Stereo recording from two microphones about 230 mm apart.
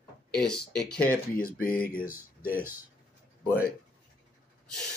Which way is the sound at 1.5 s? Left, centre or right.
Left.